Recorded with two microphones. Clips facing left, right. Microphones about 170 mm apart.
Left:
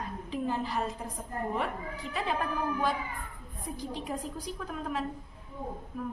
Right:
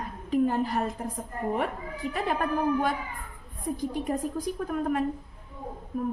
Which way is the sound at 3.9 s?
50° right (ahead or behind).